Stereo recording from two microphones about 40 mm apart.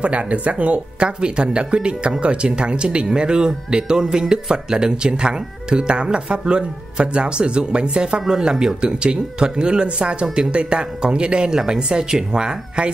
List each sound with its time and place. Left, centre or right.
0.0 s speech: right
10.2 s speech: centre
10.5 s speech: right